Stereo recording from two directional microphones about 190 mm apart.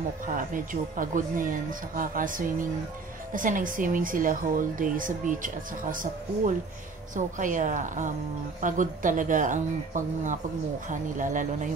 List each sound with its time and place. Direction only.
0.3 s a woman's voice: 45° right (ahead or behind)